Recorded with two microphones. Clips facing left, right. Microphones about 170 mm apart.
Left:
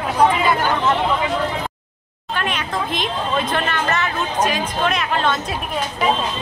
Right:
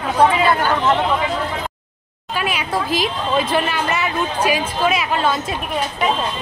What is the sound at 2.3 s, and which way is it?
Speech, 5° right (ahead or behind).